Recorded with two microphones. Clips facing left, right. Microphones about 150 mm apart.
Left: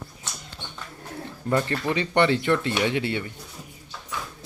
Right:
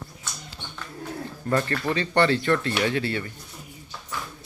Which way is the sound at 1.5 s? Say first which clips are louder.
Left 1 dB; 20° left (ahead or behind).